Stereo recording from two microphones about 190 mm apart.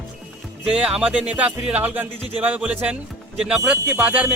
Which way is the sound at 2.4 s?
10° right (ahead or behind).